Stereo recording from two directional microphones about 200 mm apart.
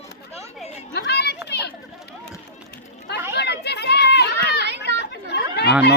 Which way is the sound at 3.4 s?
55° left (ahead or behind).